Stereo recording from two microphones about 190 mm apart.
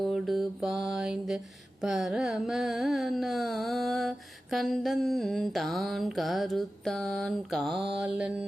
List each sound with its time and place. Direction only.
0.1 s carnatic music: centre (ahead or behind)